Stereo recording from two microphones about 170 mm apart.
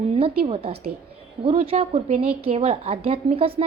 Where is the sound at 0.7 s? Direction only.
35° right (ahead or behind).